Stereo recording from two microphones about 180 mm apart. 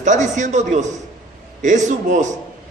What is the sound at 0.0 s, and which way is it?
A man's voice, 45° right (ahead or behind).